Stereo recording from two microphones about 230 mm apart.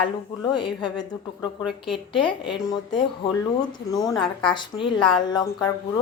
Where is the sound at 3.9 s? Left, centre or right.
Centre.